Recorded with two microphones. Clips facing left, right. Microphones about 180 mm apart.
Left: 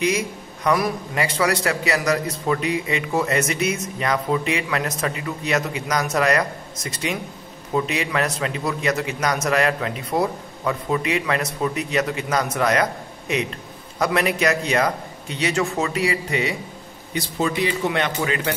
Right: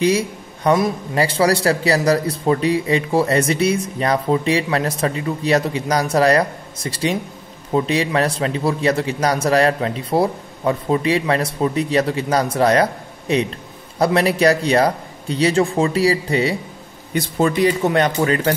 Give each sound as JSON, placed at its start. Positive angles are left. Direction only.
{"t": 0.0, "sound": "a man's voice", "side_deg": -30}
{"t": 17.1, "sound": "a man's voice", "side_deg": -45}